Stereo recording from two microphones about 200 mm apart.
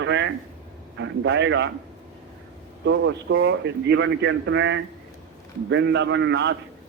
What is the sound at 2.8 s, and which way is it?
A man's voice, 70° right (ahead or behind).